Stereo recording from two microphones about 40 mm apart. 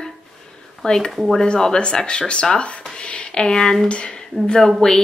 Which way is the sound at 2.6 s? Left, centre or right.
Left.